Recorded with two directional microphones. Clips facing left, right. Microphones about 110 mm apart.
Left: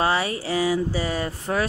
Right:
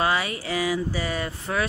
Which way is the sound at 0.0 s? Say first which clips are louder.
Left 2 dB; 30° left (ahead or behind).